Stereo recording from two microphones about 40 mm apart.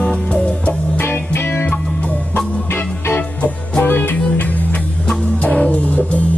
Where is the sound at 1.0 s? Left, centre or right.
Left.